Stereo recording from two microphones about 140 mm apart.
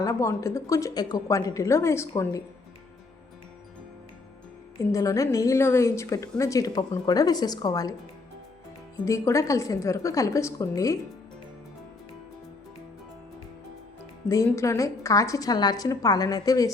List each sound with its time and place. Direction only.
0.0 s a woman's voice: 20° left (ahead or behind)
4.8 s a woman's voice: 25° left (ahead or behind)
9.0 s a woman's voice: 20° left (ahead or behind)
14.3 s a woman's voice: 20° left (ahead or behind)